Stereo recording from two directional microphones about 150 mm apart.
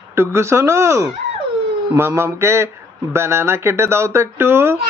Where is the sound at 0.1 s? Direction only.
15° right (ahead or behind).